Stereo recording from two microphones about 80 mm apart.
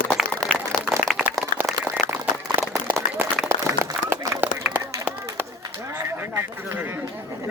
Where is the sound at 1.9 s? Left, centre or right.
Right.